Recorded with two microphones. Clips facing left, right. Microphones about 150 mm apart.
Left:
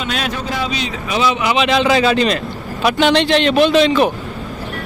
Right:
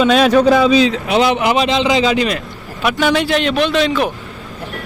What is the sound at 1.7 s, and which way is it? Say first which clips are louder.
A man's voice: left 1 dB; 20° right (ahead or behind).